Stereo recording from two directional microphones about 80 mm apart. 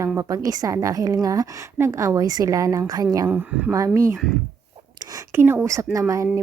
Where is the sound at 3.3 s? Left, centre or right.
Centre.